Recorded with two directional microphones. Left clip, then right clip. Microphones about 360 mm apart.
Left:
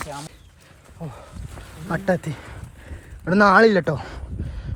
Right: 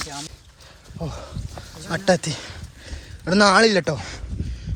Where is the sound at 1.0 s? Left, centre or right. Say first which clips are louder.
Right 5 dB; right.